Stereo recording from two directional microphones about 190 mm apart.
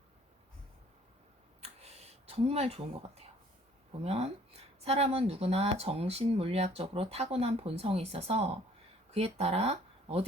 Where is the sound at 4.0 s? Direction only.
35° right (ahead or behind).